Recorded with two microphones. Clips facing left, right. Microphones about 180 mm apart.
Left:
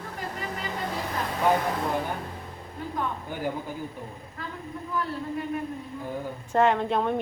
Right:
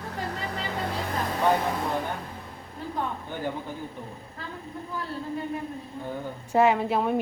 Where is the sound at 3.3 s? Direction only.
10° left (ahead or behind).